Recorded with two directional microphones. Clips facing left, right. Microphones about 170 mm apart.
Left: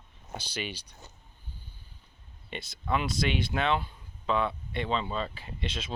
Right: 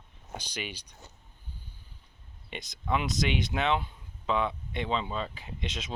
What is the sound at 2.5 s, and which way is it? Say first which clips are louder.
Speech: even; 15° right (ahead or behind).